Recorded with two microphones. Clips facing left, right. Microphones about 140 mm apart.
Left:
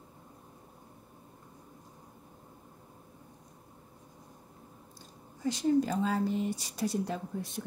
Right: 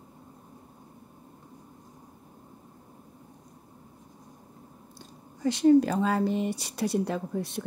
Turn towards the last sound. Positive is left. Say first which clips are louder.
# right 6 dB
turn(degrees=-70)  # may be behind; listen again after turning